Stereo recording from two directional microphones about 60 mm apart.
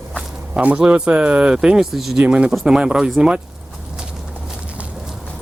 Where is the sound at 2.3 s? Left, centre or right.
Centre.